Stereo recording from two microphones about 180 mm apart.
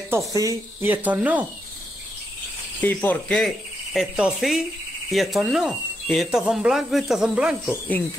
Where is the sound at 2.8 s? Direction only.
10° left (ahead or behind).